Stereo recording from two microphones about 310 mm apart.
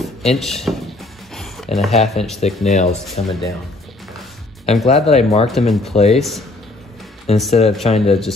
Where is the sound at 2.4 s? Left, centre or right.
Left.